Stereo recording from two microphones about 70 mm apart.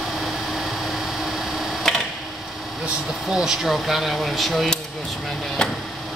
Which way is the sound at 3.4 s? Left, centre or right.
Centre.